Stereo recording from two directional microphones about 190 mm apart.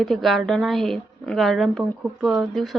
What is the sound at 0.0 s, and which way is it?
Speech, centre (ahead or behind).